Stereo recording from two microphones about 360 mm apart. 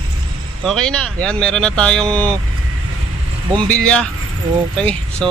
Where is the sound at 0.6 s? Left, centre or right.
Centre.